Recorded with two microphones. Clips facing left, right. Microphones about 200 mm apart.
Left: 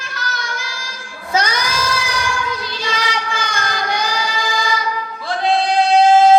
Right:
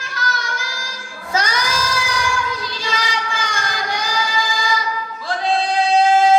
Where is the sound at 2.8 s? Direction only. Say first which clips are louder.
Left 2 dB; 60° left (ahead or behind).